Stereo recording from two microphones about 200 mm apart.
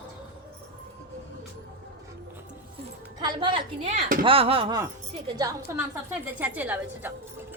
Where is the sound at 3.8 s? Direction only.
40° right (ahead or behind).